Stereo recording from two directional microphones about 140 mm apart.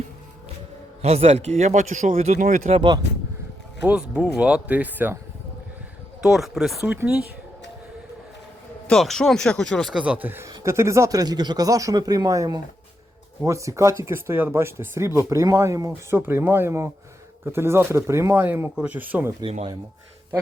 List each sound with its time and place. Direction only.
1.0 s a man's voice: 50° right (ahead or behind); by 2.6 s 70° right (ahead or behind)
2.6 s speech: 45° right (ahead or behind)
3.8 s speech: 10° right (ahead or behind)
6.2 s speech: centre (ahead or behind)
8.9 s speech: 5° left (ahead or behind)
10.0 s speech: 10° right (ahead or behind)